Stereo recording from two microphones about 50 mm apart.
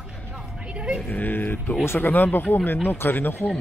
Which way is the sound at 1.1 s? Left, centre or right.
Left.